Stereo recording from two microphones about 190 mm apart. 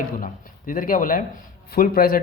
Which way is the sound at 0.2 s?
45° left (ahead or behind).